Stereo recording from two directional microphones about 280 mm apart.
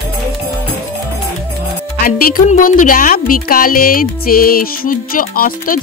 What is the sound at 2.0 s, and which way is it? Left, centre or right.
Speech, left.